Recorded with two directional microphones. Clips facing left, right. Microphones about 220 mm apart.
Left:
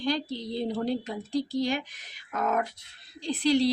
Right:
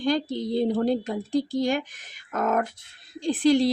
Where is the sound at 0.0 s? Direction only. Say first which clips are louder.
Right 5 dB; 50° right (ahead or behind).